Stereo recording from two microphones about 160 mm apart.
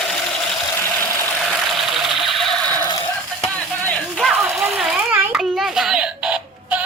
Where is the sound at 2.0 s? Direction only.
Centre (ahead or behind).